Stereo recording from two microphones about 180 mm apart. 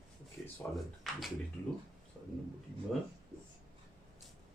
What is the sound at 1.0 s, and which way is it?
Speech, centre (ahead or behind).